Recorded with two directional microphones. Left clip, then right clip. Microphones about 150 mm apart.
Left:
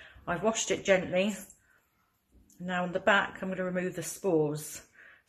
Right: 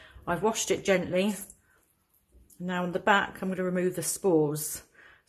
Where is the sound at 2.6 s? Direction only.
25° right (ahead or behind).